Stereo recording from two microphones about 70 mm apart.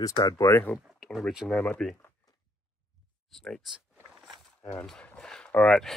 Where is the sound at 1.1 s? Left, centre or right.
Centre.